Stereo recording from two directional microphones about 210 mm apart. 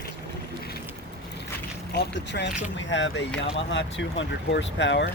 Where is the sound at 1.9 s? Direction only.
55° left (ahead or behind).